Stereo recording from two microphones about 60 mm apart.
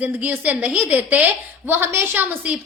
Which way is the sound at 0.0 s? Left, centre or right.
Right.